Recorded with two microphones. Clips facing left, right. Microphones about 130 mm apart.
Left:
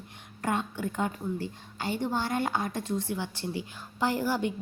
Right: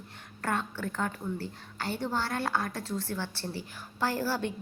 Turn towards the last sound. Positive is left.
turn(degrees=15)  # may be behind; listen again after turning